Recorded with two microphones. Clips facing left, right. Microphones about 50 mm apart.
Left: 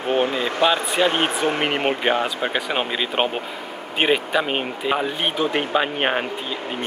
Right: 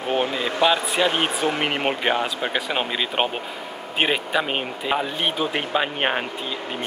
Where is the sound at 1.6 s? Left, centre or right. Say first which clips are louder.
Left 2 dB; left.